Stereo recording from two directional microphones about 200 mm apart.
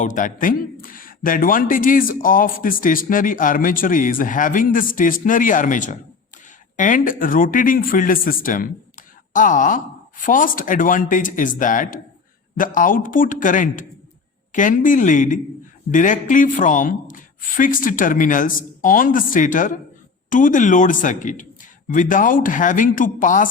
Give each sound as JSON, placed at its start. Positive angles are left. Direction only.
{"t": 0.0, "sound": "a man's voice", "side_deg": 40}